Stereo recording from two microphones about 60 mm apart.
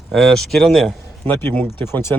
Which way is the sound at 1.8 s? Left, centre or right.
Left.